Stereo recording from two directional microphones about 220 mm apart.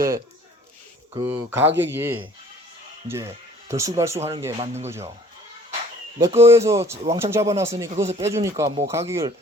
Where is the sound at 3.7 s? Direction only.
15° right (ahead or behind).